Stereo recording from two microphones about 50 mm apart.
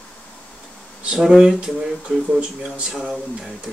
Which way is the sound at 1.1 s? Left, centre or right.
Centre.